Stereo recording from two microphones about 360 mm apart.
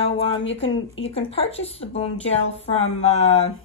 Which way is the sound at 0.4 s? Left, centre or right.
Left.